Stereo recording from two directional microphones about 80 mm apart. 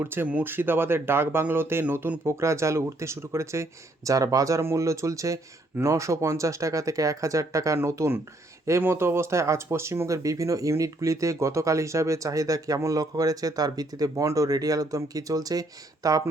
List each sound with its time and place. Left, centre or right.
0.0 s speech: right
10.2 s speech: right